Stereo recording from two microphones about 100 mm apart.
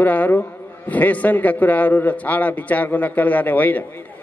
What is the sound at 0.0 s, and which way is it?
A man's voice, 15° left (ahead or behind).